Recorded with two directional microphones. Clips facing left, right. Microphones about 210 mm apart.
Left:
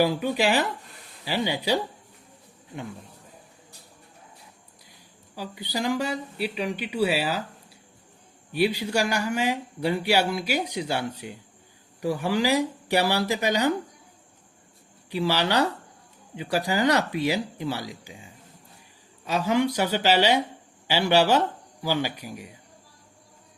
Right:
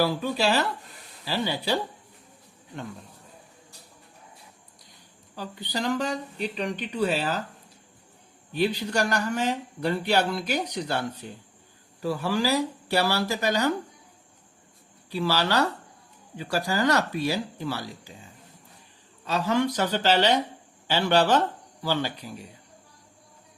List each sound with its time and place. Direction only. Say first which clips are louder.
0.0 s speech: left 2 dB; 15° left (ahead or behind)
5.3 s speech: left 1 dB; 10° left (ahead or behind)
8.5 s speech: left 1 dB; 10° left (ahead or behind)
15.1 s speech: left 1 dB; 15° left (ahead or behind)
19.2 s speech: left 1 dB; 10° left (ahead or behind)